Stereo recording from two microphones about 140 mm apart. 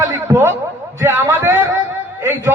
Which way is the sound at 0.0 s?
15° right (ahead or behind).